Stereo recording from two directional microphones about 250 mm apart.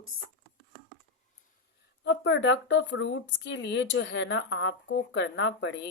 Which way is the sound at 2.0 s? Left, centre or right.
Left.